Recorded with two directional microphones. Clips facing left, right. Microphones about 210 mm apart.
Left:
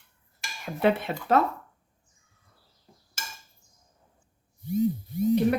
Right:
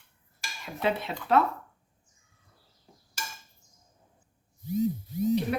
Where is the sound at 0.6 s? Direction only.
55° left (ahead or behind).